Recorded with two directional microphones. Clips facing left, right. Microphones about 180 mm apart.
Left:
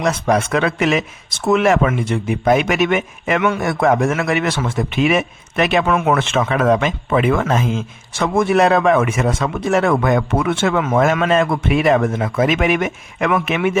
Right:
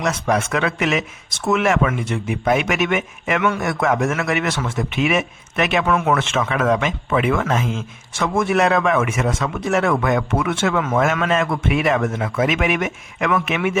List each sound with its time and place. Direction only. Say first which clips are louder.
0.0 s a man's voice: left 3 dB; 35° left (ahead or behind)